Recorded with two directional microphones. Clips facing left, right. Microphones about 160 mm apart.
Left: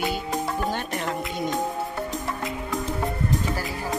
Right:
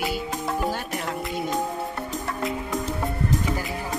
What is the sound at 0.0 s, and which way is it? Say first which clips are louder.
Music: left 1 dB; 5° right (ahead or behind).